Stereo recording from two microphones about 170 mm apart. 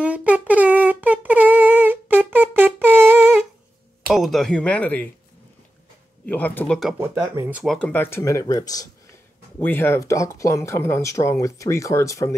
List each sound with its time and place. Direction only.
0.0 s humming: 10° right (ahead or behind)
4.1 s speech: centre (ahead or behind)
6.2 s speech: 10° left (ahead or behind)
7.0 s speech: 10° right (ahead or behind)
7.6 s speech: 5° left (ahead or behind)